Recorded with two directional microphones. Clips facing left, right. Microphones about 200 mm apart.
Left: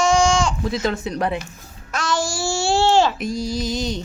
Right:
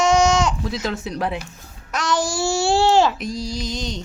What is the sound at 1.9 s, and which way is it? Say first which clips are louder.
Babbling: right 1 dB; 20° right (ahead or behind).